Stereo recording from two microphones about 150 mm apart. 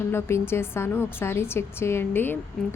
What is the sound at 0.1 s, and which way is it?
A woman's voice, 15° left (ahead or behind).